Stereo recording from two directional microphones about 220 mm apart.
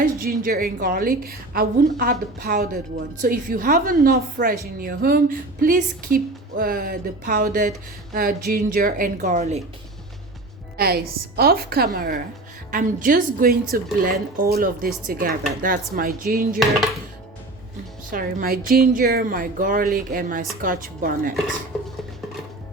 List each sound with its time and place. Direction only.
0.0 s a woman's voice: 40° right (ahead or behind)
10.8 s a woman's voice: 45° right (ahead or behind)
16.6 s dishes: centre (ahead or behind)
18.1 s a woman's voice: 40° right (ahead or behind)